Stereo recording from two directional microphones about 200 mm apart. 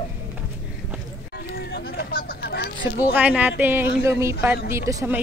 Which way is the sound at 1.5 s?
50° left (ahead or behind).